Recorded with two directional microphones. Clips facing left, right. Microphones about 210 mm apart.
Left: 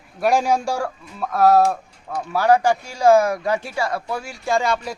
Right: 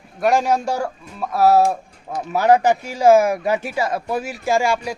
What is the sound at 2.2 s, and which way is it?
Speech, 20° right (ahead or behind).